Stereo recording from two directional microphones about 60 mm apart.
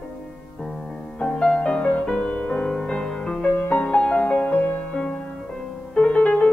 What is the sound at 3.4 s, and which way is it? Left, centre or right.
Music, left.